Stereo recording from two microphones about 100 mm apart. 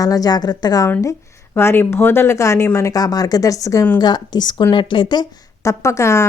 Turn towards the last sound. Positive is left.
turn(degrees=30)  # may be behind; listen again after turning